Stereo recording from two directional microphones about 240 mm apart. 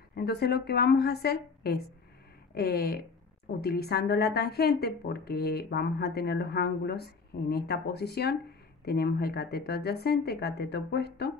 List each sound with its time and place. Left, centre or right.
0.1 s a woman's voice: left